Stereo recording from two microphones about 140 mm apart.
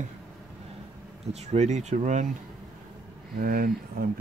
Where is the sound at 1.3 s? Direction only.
50° right (ahead or behind).